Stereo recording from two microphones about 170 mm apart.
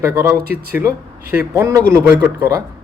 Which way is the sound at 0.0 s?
15° right (ahead or behind).